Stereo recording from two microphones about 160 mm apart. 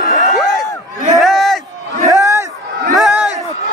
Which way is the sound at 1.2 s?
Centre (ahead or behind).